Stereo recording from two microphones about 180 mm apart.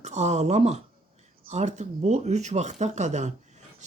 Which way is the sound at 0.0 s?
40° right (ahead or behind).